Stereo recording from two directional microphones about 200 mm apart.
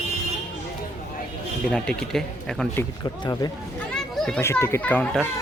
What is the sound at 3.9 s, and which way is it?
Children playing, centre (ahead or behind).